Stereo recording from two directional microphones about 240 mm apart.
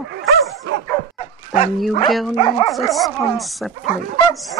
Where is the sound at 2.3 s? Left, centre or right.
Centre.